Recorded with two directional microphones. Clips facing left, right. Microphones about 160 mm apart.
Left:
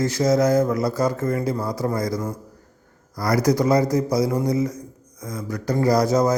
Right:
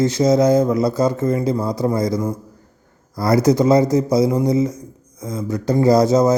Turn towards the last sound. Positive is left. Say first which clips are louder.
# right 5 dB
turn(degrees=-25)  # may be behind; listen again after turning